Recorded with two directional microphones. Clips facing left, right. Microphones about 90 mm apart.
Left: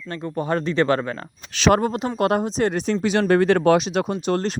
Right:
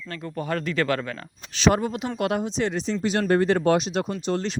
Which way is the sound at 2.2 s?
45° left (ahead or behind).